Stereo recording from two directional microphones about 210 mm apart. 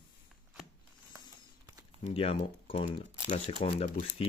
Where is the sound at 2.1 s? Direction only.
25° left (ahead or behind).